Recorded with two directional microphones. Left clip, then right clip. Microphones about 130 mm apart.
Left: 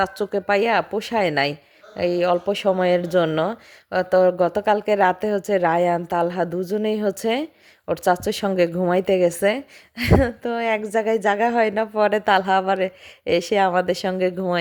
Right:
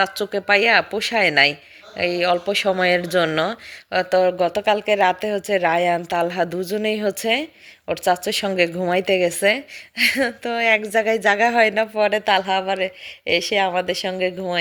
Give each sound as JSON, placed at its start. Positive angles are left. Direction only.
{"t": 0.0, "sound": "speech", "side_deg": 40}